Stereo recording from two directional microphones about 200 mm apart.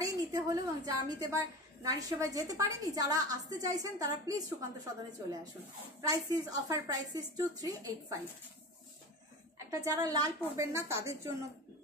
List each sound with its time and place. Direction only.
0.0 s a woman's voice: 15° right (ahead or behind)
5.9 s a woman's voice: 15° right (ahead or behind)
9.7 s a woman's voice: 15° right (ahead or behind)